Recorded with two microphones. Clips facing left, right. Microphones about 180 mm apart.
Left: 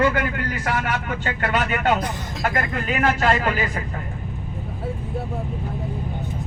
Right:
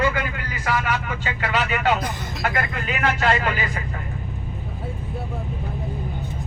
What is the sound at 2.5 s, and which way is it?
Speech, 40° left (ahead or behind).